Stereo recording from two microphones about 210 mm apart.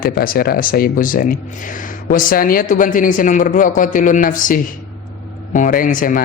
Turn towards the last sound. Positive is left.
turn(degrees=40)  # may be behind; listen again after turning